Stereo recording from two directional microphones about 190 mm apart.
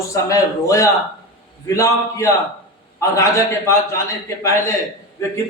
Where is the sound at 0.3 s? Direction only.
15° left (ahead or behind).